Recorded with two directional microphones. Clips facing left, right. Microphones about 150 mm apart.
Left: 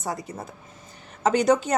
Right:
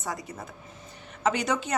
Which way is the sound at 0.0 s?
35° left (ahead or behind).